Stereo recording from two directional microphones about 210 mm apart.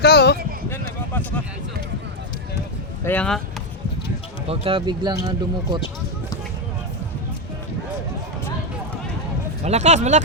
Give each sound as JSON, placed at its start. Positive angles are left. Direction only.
{"t": 0.0, "sound": "speech", "side_deg": 50}
{"t": 3.0, "sound": "speech", "side_deg": 10}
{"t": 4.4, "sound": "speech", "side_deg": -25}
{"t": 9.6, "sound": "speech", "side_deg": -30}